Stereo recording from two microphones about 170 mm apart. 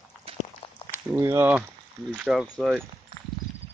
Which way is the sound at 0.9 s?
15° right (ahead or behind).